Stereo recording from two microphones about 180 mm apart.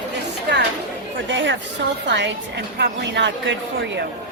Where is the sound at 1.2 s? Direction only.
90° right.